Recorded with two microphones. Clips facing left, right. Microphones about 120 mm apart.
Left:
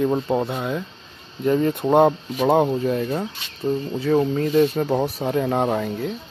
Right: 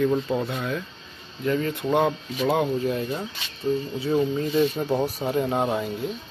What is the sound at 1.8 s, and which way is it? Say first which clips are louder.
Speech: left 6 dB; 40° left (ahead or behind).